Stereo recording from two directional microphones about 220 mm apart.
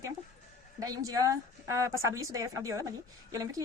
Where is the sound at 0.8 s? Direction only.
15° right (ahead or behind).